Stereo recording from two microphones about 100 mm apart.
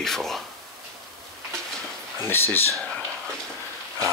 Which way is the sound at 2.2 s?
25° left (ahead or behind).